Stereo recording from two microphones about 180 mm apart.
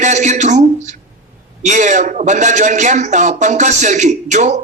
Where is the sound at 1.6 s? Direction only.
45° right (ahead or behind).